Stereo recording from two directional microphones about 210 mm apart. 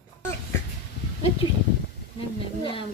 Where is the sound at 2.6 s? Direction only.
25° left (ahead or behind).